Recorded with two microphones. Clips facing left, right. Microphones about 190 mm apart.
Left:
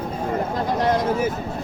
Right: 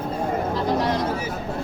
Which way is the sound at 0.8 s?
50° left (ahead or behind).